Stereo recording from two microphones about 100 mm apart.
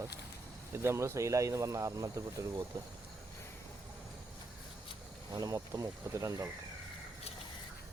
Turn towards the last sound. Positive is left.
turn(degrees=-35)  # may be behind; listen again after turning